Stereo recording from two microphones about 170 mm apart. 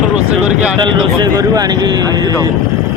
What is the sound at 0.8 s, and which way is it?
Speech, 25° right (ahead or behind).